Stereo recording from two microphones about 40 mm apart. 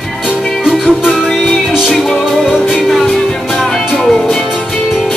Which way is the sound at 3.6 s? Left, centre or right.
Centre.